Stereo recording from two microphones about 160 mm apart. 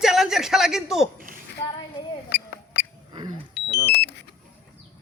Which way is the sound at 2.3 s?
90° left.